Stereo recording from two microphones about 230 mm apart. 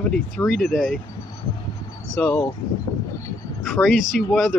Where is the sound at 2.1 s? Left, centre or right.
Centre.